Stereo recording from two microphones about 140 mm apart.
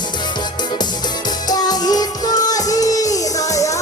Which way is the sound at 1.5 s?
30° left (ahead or behind).